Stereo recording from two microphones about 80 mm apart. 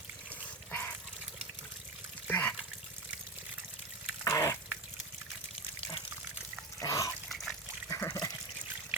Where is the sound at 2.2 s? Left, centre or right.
Left.